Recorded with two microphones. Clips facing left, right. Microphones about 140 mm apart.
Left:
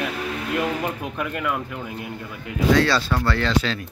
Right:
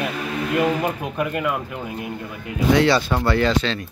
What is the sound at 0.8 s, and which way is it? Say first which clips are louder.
Speech: right 4 dB; 10° right (ahead or behind).